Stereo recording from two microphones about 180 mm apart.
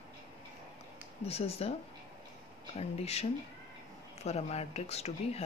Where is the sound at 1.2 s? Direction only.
35° left (ahead or behind).